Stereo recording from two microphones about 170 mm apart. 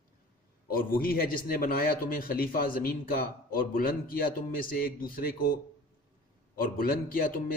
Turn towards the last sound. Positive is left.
turn(degrees=55)  # may be behind; listen again after turning